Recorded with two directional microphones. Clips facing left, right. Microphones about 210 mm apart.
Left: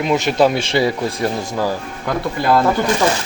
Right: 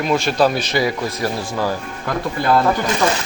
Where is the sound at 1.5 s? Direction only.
15° left (ahead or behind).